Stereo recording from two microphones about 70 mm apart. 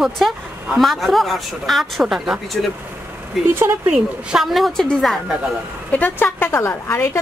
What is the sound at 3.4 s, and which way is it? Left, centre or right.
Speech, right.